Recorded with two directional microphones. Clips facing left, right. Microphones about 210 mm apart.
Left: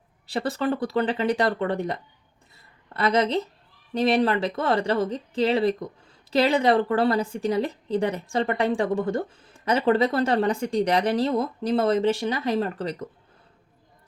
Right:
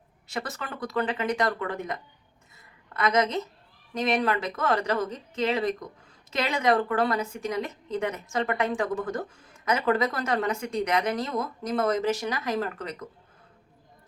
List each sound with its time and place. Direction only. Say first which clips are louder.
0.3 s a woman's voice: left 10 dB; 30° left (ahead or behind)